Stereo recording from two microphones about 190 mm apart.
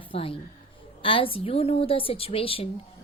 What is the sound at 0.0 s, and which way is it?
A woman's voice, 30° left (ahead or behind).